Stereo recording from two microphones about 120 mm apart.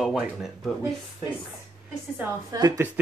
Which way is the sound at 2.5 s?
35° right (ahead or behind).